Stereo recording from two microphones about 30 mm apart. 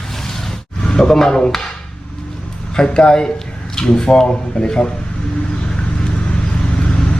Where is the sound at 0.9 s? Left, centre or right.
Left.